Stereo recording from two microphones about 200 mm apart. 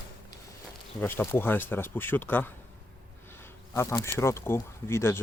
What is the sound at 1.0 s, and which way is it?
Speech, 10° left (ahead or behind).